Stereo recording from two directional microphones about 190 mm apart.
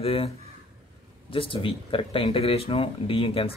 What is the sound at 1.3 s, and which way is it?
Speech, 25° left (ahead or behind).